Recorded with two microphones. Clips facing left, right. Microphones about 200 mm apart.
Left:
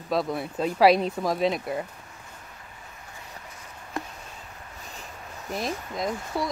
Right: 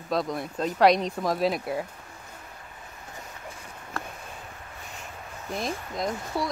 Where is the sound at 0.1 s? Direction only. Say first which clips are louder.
Left 1 dB; 5° left (ahead or behind).